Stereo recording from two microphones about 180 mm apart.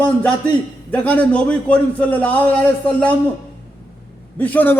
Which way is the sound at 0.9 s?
10° left (ahead or behind).